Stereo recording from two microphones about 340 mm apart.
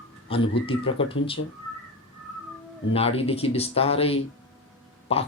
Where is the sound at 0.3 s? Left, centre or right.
Centre.